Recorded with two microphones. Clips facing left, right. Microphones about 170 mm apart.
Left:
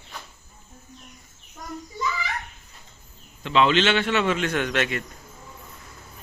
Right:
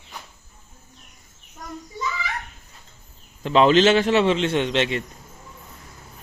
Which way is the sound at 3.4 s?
40° right (ahead or behind).